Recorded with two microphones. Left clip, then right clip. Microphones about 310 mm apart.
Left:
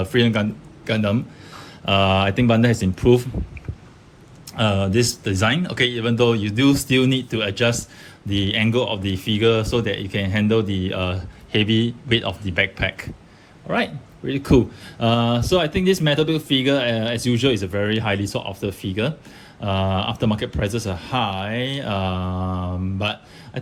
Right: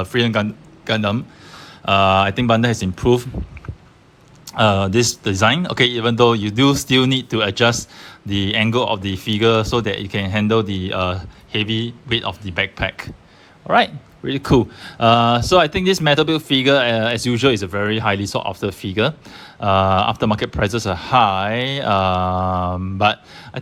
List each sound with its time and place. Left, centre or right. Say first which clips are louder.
0.0 s speech: right 1 dB; centre
4.4 s speech: right 6 dB; centre